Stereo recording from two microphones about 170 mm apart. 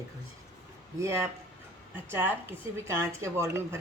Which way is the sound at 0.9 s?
15° right (ahead or behind).